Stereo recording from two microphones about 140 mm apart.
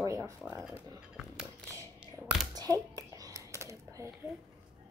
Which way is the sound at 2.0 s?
Centre (ahead or behind).